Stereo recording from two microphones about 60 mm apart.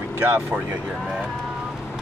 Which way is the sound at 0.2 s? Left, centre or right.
Right.